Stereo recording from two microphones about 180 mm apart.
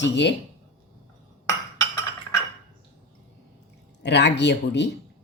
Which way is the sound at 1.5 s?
15° left (ahead or behind).